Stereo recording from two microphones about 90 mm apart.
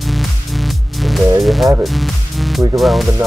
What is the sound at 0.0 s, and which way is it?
Music, centre (ahead or behind).